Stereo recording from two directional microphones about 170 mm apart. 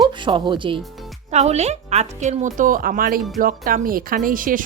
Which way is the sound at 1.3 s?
40° right (ahead or behind).